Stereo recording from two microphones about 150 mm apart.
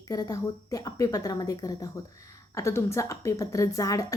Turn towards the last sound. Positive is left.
turn(degrees=20)  # may be behind; listen again after turning